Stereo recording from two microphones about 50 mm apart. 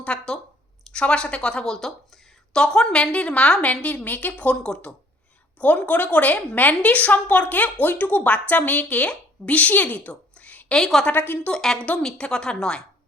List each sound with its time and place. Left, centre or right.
0.0 s a woman's voice: left
3.6 s a woman's voice: left
4.6 s a woman's voice: centre
10.8 s a woman's voice: centre
11.1 s a woman's voice: left
11.5 s speech: centre